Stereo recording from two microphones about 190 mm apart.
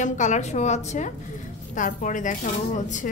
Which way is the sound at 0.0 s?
40° left (ahead or behind).